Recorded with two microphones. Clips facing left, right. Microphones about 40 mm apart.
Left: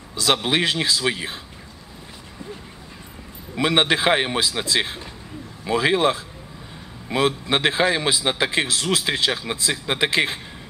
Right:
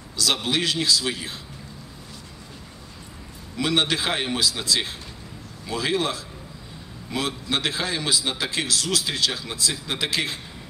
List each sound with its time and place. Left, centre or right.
0.1 s a man's voice: left
3.5 s a man's voice: left